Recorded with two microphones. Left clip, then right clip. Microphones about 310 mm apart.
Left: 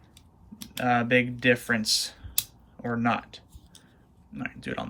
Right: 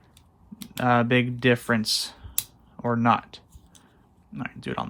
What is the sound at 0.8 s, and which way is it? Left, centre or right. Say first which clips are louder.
Speech: right 2 dB; centre.